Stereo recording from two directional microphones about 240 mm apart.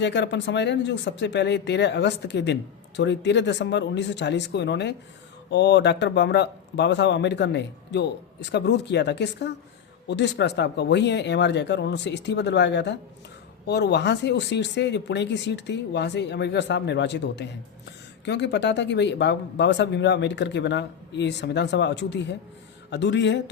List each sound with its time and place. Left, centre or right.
0.0 s speech: left